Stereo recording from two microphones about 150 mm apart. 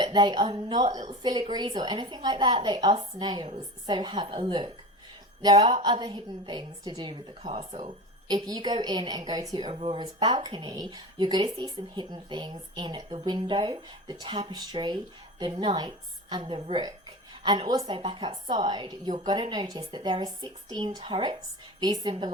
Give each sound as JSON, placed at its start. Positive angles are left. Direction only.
{"t": 0.0, "sound": "a woman's voice", "side_deg": -30}
{"t": 8.3, "sound": "a woman's voice", "side_deg": -25}